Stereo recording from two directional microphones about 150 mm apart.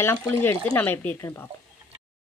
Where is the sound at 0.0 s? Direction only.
15° left (ahead or behind).